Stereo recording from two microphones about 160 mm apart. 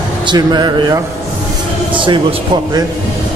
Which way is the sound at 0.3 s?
25° right (ahead or behind).